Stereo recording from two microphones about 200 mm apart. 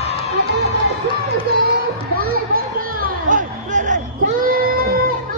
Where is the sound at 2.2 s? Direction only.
45° right (ahead or behind).